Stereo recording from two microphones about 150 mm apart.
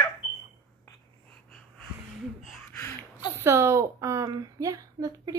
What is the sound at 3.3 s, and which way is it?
A woman's voice, 20° right (ahead or behind).